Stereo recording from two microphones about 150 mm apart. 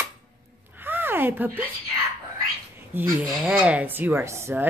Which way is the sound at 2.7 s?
15° right (ahead or behind).